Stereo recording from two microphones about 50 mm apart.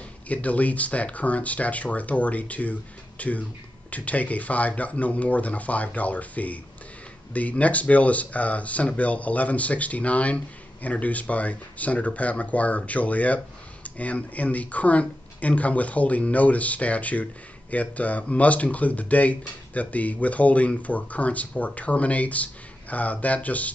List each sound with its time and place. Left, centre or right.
0.3 s speech: left